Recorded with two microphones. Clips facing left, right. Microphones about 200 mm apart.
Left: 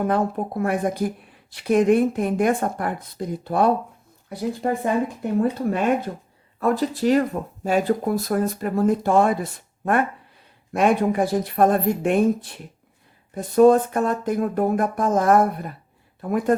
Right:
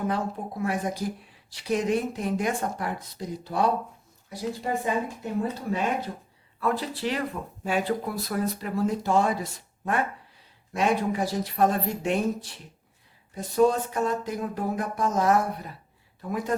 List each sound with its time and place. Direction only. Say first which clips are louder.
0.0 s speech: left 7 dB; 55° left (ahead or behind)
6.6 s speech: left 7 dB; 45° left (ahead or behind)